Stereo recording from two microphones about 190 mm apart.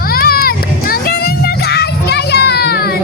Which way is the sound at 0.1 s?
50° left (ahead or behind).